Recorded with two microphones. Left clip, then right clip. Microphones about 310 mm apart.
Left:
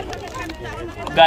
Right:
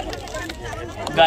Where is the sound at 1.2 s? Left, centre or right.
Centre.